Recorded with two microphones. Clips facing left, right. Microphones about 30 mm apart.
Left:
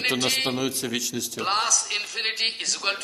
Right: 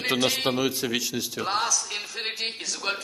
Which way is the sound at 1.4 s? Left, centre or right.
Left.